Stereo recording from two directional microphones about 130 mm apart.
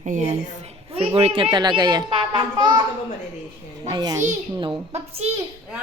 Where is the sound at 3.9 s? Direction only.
30° right (ahead or behind).